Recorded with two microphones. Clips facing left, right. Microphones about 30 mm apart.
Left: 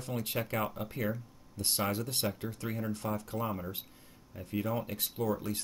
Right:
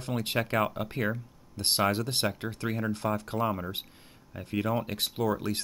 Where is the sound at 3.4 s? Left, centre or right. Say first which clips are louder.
Right 9 dB; right.